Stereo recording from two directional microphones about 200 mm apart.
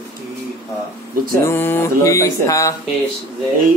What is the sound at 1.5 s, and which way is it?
Speech, 10° left (ahead or behind).